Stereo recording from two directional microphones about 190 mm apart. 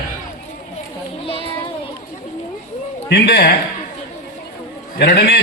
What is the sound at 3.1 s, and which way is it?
Speech, 60° left (ahead or behind).